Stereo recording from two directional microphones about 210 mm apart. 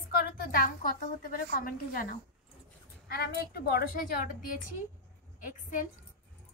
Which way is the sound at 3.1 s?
50° left (ahead or behind).